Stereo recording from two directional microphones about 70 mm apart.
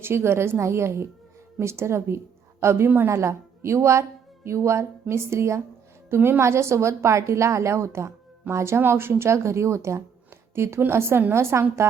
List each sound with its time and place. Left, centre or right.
0.0 s a woman's voice: right
3.1 s a woman's voice: right
6.1 s a woman's voice: right
6.4 s a woman's voice: right